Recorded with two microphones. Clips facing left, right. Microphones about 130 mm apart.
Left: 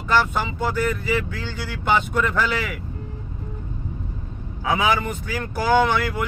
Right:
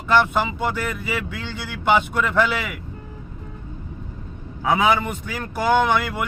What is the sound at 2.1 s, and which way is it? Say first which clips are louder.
Speech: right 2 dB; 5° right (ahead or behind).